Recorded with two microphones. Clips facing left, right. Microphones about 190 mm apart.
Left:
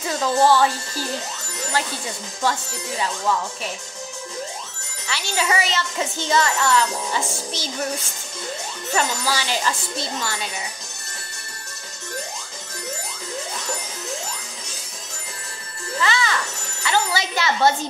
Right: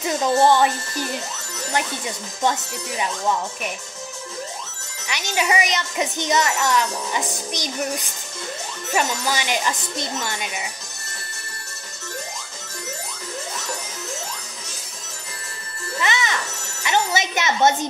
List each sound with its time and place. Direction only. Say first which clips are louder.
0.0 s speech: right 1 dB; 20° right (ahead or behind)
2.4 s speech: right 1 dB; 20° right (ahead or behind)
5.0 s speech: right 1 dB; 15° right (ahead or behind)
16.0 s music: left 1 dB; 20° right (ahead or behind)
16.8 s speech: right 1 dB; 20° right (ahead or behind)